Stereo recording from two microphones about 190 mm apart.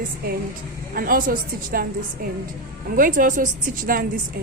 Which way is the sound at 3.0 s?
45° right (ahead or behind).